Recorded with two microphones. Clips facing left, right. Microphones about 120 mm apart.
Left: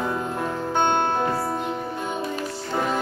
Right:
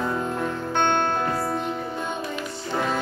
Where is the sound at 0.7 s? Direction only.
15° left (ahead or behind).